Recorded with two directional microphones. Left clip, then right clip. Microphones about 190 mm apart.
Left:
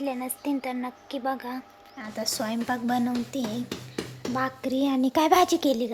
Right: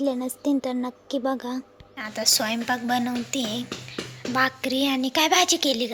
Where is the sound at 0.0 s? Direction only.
25° right (ahead or behind).